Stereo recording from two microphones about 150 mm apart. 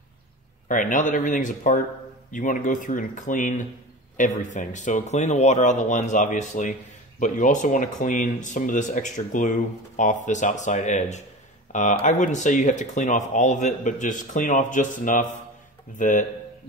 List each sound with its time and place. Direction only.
0.7 s speech: 60° left (ahead or behind)